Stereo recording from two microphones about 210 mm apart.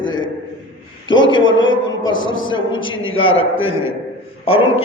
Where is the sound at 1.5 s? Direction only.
65° left (ahead or behind).